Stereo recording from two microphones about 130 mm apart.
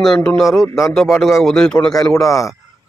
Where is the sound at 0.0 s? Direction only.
5° left (ahead or behind).